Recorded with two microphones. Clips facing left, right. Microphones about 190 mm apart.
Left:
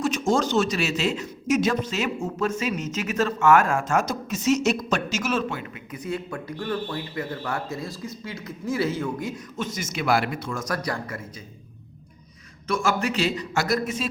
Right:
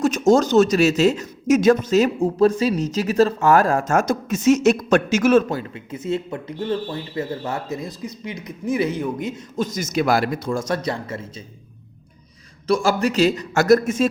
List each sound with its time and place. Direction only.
0.0 s speech: 40° right (ahead or behind)
5.5 s speech: 35° right (ahead or behind)
9.6 s speech: 40° right (ahead or behind)
12.6 s a man's voice: 35° right (ahead or behind)